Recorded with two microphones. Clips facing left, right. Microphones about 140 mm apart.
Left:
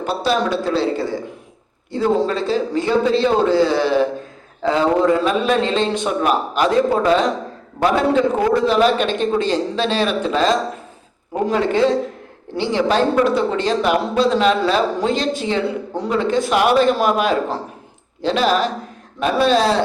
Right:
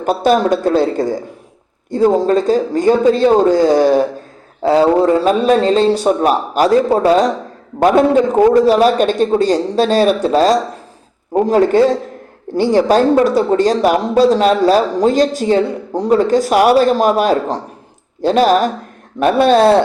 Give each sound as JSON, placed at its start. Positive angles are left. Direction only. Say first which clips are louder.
{"t": 0.0, "sound": "a man's voice", "louder": "right 6 dB", "side_deg": -50}